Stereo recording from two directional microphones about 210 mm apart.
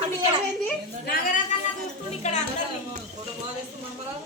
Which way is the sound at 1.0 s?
40° left (ahead or behind).